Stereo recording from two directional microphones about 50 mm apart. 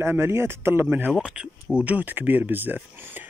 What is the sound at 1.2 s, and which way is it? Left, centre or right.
Speech, centre.